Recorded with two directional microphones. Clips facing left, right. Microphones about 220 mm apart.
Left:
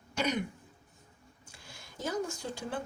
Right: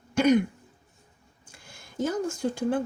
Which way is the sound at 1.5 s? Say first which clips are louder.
Right 9 dB; 50° right (ahead or behind).